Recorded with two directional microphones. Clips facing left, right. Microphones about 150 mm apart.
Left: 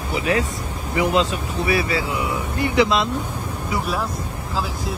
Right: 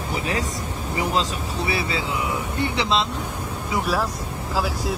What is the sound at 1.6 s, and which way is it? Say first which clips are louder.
Speech: left 5 dB; 25° right (ahead or behind).